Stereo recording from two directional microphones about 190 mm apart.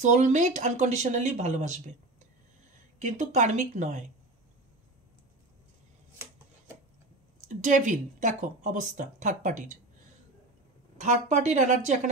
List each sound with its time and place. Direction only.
0.0 s speech: 40° right (ahead or behind)
7.3 s speech: 40° right (ahead or behind)
11.0 s speech: 35° right (ahead or behind)